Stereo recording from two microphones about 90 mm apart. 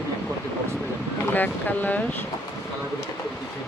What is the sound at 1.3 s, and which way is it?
Speech, 20° left (ahead or behind).